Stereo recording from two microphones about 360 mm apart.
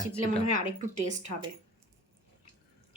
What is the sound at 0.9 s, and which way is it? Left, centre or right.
Speech, centre.